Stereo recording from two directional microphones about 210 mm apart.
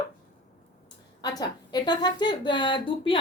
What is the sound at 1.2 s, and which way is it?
A woman's voice, 20° left (ahead or behind).